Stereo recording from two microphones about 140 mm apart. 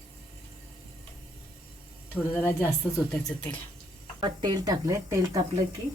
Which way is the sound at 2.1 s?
15° left (ahead or behind).